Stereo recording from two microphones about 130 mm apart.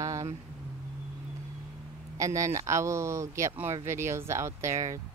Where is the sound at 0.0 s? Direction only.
25° right (ahead or behind).